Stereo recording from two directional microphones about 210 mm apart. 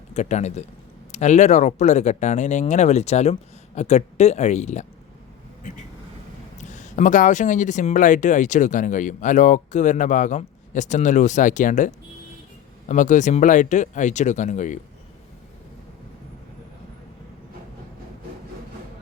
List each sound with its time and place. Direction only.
0.1 s speech: 35° left (ahead or behind)
12.9 s speech: 35° left (ahead or behind)